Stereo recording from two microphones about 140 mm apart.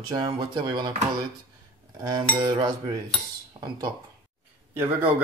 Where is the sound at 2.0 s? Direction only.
25° right (ahead or behind).